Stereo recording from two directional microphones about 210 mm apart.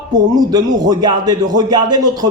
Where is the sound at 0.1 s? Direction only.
20° right (ahead or behind).